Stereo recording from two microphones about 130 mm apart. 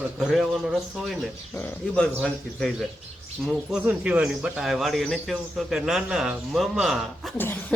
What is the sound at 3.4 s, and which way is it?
Speech, 5° right (ahead or behind).